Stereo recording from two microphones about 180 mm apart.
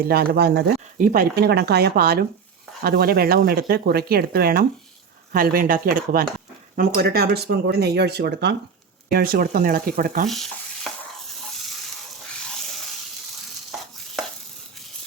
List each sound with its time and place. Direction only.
0.0 s speech: 60° right (ahead or behind)
9.0 s speech: 55° right (ahead or behind)
10.2 s stir: centre (ahead or behind)
13.7 s stir: centre (ahead or behind)